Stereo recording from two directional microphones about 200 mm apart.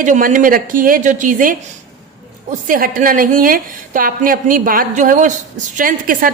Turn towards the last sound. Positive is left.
turn(degrees=-45)  # may be behind; listen again after turning